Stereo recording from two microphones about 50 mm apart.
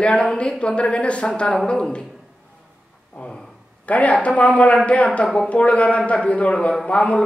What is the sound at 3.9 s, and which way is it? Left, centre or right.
A woman's voice, left.